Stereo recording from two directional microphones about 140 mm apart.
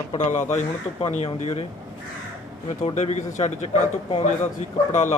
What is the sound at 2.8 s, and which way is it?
Speech, 55° left (ahead or behind).